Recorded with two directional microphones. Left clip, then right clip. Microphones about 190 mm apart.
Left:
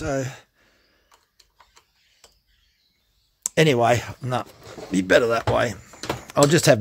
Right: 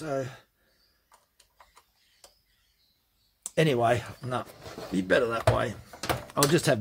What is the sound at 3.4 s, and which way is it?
Speech, 55° left (ahead or behind).